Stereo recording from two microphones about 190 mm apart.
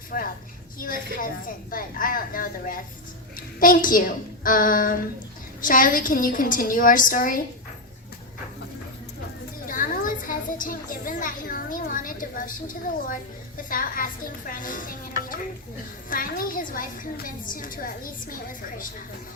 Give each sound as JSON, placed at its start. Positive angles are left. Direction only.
{"t": 0.1, "sound": "a woman's voice", "side_deg": 50}
{"t": 9.6, "sound": "a woman's voice", "side_deg": 45}
{"t": 16.0, "sound": "a woman's voice", "side_deg": 45}